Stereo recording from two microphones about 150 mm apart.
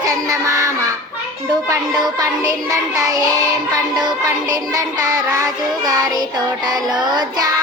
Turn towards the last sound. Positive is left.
turn(degrees=-25)  # may be behind; listen again after turning